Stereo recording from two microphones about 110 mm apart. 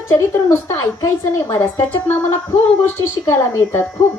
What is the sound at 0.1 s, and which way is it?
Speech, 25° left (ahead or behind).